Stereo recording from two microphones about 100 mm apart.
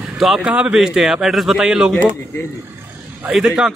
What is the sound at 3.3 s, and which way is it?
Speech, 5° right (ahead or behind).